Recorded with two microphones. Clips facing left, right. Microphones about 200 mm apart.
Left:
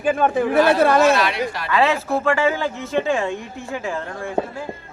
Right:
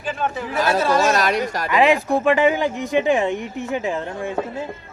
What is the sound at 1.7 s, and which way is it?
Speech, 15° right (ahead or behind).